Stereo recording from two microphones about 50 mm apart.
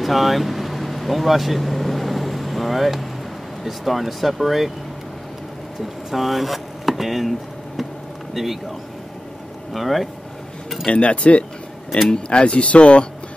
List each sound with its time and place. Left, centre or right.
0.0 s vehicle: centre
3.6 s speech: centre
5.8 s a sound: centre
8.4 s speech: centre
9.8 s speech: centre
10.9 s speech: left